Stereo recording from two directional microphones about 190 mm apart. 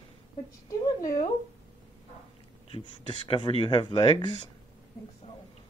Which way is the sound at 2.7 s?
25° left (ahead or behind).